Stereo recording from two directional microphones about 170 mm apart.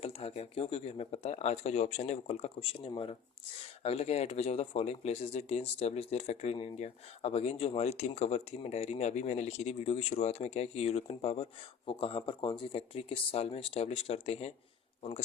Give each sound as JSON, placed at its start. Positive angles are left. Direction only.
{"t": 0.0, "sound": "speech", "side_deg": 35}